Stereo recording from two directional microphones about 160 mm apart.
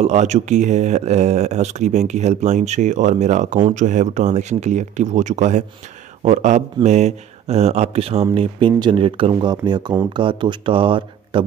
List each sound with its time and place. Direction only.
0.0 s a man's voice: 45° right (ahead or behind)